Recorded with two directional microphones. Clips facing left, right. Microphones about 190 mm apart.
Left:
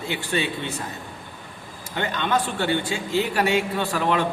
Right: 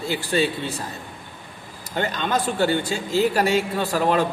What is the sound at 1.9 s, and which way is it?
Speech, 40° right (ahead or behind).